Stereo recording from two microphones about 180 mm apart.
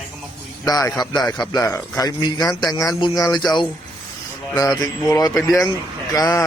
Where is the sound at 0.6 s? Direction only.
20° left (ahead or behind).